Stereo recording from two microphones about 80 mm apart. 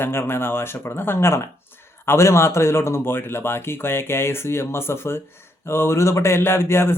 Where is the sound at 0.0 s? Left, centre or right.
Left.